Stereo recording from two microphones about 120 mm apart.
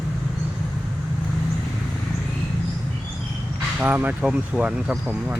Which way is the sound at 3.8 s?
15° right (ahead or behind).